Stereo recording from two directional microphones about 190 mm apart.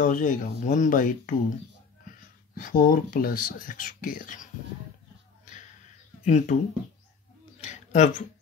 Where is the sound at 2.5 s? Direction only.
45° left (ahead or behind).